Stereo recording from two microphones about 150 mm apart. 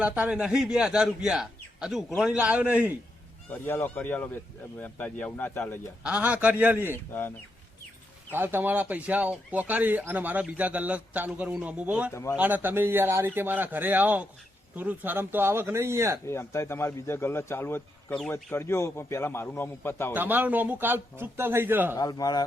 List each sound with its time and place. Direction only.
0.0 s a man's voice: 5° right (ahead or behind)
3.5 s a man's voice: 15° left (ahead or behind)
6.0 s speech: 10° right (ahead or behind)
6.9 s a man's voice: 15° left (ahead or behind)
8.3 s speech: 15° right (ahead or behind)
12.1 s a man's voice: 20° left (ahead or behind)
12.4 s speech: 10° right (ahead or behind)
16.2 s a man's voice: 15° left (ahead or behind)
20.1 s speech: 10° right (ahead or behind)
21.9 s a man's voice: 25° left (ahead or behind)